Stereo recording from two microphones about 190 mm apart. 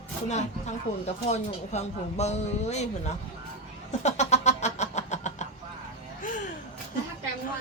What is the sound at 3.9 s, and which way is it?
Cat, 35° left (ahead or behind).